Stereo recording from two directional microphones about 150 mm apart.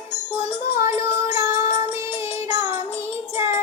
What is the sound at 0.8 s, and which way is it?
Female singing, 15° right (ahead or behind).